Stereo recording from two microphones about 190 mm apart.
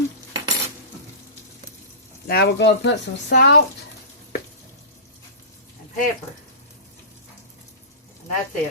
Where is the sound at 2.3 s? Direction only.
60° left (ahead or behind).